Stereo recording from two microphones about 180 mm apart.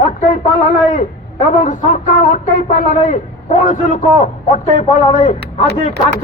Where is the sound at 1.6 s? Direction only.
45° left (ahead or behind).